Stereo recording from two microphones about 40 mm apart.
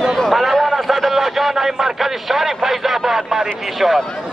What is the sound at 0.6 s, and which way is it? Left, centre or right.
A man's voice, centre.